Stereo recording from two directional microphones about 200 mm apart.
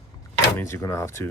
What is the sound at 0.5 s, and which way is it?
Speech, 15° left (ahead or behind).